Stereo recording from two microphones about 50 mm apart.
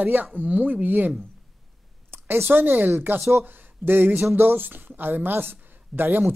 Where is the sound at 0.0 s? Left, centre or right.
Right.